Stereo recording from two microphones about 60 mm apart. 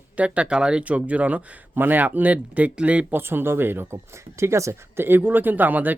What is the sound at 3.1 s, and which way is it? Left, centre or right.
Speech, right.